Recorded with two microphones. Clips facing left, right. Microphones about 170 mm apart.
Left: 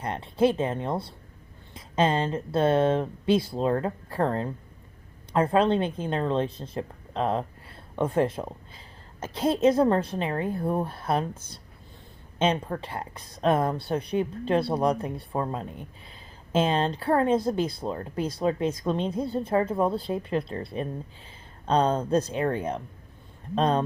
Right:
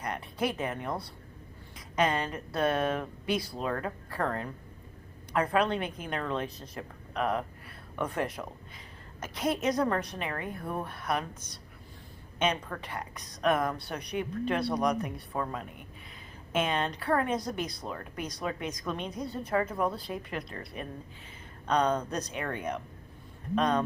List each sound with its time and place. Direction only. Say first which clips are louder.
0.0 s speech: left 9 dB; 25° left (ahead or behind)